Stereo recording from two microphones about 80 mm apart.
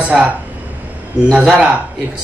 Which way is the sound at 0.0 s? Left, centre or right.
Centre.